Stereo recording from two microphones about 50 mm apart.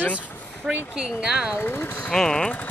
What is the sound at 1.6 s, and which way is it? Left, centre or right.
Speech, left.